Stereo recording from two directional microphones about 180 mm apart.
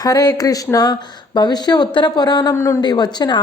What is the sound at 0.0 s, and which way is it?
Speech, 20° left (ahead or behind).